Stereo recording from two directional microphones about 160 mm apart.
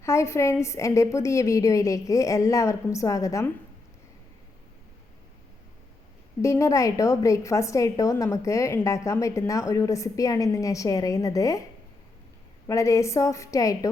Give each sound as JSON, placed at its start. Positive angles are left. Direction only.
{"t": 0.0, "sound": "a woman's voice", "side_deg": 15}
{"t": 6.4, "sound": "a woman's voice", "side_deg": 20}
{"t": 12.6, "sound": "a woman's voice", "side_deg": 20}